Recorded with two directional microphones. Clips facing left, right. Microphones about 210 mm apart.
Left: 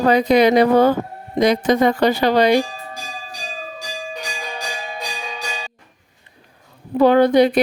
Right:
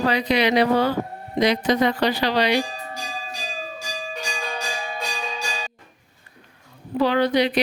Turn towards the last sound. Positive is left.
turn(degrees=50)  # may be behind; listen again after turning